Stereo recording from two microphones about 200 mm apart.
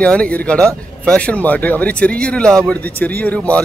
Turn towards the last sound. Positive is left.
turn(degrees=5)  # may be behind; listen again after turning